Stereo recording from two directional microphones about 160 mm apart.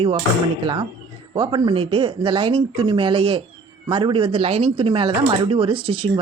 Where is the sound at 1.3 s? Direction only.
30° right (ahead or behind).